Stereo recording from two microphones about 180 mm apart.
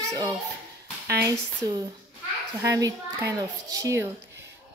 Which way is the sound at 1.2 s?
15° right (ahead or behind).